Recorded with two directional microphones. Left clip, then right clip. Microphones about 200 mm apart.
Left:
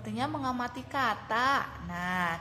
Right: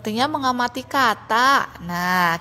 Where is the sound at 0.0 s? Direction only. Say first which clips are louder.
Right 12 dB; 45° right (ahead or behind).